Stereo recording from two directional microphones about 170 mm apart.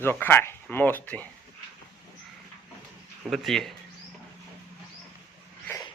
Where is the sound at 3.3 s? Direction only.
Centre (ahead or behind).